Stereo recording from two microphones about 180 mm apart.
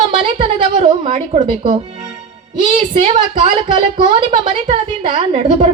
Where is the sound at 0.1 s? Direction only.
30° right (ahead or behind).